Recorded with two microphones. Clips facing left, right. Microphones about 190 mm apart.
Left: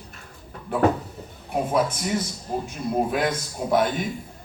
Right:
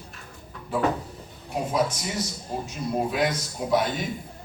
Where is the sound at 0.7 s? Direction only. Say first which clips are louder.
Left 4 dB; 60° left (ahead or behind).